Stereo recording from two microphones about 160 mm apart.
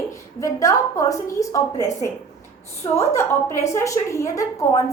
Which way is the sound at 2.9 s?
20° left (ahead or behind).